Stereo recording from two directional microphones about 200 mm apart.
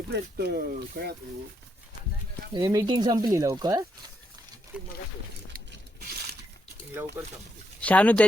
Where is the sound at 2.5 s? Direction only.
20° right (ahead or behind).